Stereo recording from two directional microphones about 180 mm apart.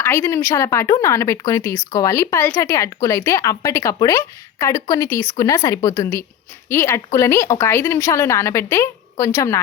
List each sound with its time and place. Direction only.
0.0 s a woman's voice: 15° left (ahead or behind)